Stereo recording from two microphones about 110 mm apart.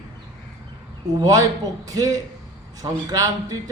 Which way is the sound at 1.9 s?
30° right (ahead or behind).